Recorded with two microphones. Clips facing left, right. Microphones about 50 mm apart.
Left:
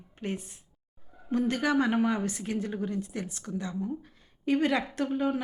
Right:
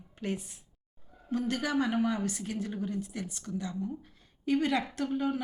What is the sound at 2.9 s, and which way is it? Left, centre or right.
A woman's voice, centre.